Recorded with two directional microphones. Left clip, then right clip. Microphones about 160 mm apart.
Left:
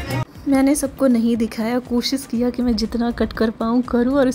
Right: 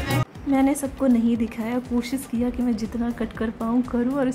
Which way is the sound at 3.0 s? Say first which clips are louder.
Left 9 dB; 40° left (ahead or behind).